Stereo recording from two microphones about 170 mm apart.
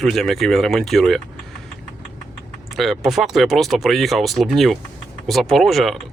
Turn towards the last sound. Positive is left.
turn(degrees=0)  # may be behind; listen again after turning